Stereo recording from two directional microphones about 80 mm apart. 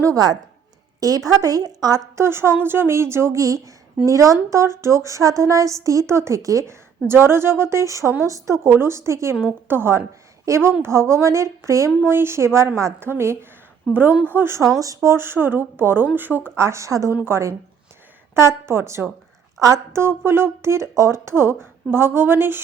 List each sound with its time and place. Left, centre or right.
0.0 s a woman's voice: right
2.1 s speech: right
7.1 s speech: right
12.0 s speech: right
16.6 s speech: right